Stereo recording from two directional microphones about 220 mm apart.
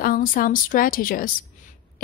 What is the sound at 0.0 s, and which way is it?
A woman's voice, 40° left (ahead or behind).